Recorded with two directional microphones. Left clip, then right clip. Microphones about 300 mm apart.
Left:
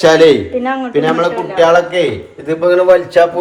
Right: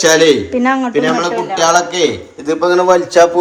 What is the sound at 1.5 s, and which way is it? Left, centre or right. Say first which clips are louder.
Speech: left 3 dB; centre.